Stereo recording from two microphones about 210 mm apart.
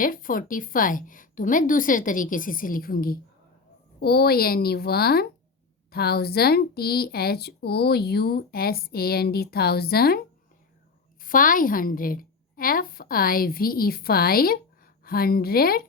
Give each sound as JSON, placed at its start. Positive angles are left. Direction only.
{"t": 0.0, "sound": "a woman's voice", "side_deg": 40}